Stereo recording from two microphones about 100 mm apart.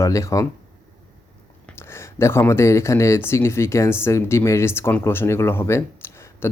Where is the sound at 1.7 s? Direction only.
25° left (ahead or behind).